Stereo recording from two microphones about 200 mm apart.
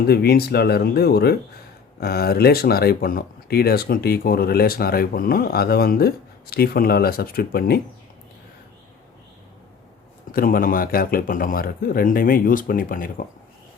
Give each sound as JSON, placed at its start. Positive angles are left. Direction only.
{"t": 0.1, "sound": "speech", "side_deg": 50}
{"t": 10.3, "sound": "speech", "side_deg": 45}